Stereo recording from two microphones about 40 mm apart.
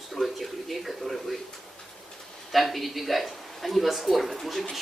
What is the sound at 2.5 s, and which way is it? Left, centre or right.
Speech, centre.